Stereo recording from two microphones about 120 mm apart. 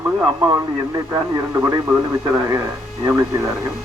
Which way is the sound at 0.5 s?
30° right (ahead or behind).